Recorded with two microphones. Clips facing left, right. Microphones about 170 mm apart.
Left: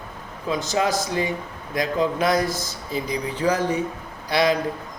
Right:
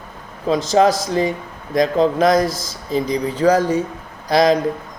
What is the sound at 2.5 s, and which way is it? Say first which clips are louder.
Speech: right 1 dB; 90° right.